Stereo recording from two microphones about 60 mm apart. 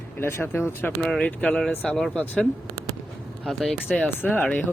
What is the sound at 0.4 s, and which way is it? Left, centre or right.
Speech, left.